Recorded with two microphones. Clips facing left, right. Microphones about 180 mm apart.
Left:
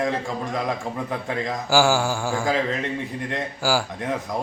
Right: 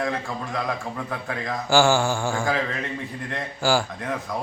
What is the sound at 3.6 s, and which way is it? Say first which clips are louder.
Mantra: right 2 dB; 5° left (ahead or behind).